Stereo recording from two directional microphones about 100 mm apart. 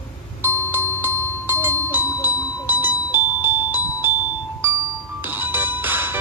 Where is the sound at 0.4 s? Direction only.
20° right (ahead or behind).